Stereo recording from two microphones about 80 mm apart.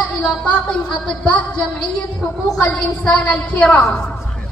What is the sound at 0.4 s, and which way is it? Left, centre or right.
A woman's voice, centre.